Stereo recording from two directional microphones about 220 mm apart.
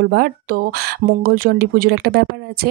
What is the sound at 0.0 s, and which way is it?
Speech, 45° right (ahead or behind).